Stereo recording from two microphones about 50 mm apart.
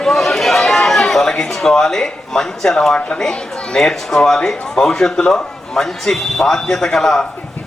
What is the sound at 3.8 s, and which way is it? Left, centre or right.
A man's voice, centre.